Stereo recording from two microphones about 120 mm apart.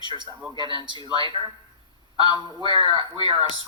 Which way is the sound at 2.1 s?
40° left (ahead or behind).